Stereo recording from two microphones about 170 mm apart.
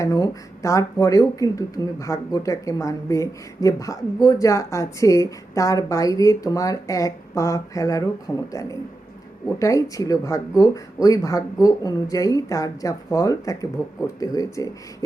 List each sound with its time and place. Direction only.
0.0 s speech: 20° left (ahead or behind)
9.6 s speech: 20° left (ahead or behind)